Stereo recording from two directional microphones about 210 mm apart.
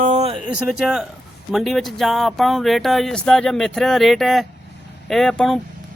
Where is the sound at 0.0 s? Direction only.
35° right (ahead or behind).